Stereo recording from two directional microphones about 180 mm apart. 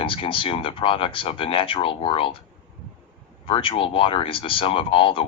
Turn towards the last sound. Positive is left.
turn(degrees=30)  # may be behind; listen again after turning